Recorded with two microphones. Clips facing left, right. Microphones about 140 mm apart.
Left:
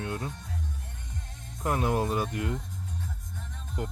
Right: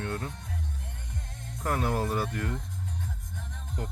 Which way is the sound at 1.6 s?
15° left (ahead or behind).